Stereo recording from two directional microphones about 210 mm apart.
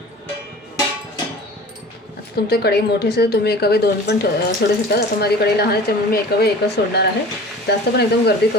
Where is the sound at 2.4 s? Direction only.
50° left (ahead or behind).